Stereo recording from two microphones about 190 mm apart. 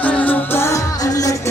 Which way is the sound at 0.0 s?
10° left (ahead or behind).